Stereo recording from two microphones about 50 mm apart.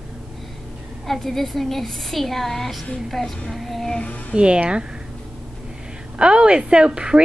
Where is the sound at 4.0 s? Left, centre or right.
Left.